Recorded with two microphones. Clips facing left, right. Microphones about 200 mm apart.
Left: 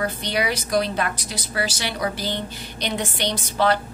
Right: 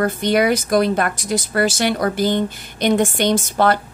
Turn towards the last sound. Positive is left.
turn(degrees=-50)  # may be behind; listen again after turning